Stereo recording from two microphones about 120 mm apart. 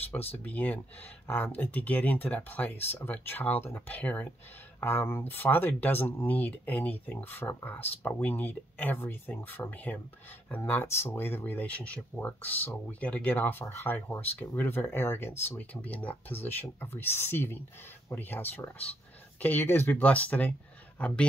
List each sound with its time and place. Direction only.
0.1 s speech: 15° left (ahead or behind)